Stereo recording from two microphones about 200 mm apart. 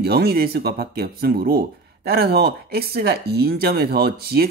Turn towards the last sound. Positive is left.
turn(degrees=-50)  # may be behind; listen again after turning